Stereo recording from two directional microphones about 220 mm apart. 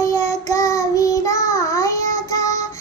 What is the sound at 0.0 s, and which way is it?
Child singing, 15° left (ahead or behind).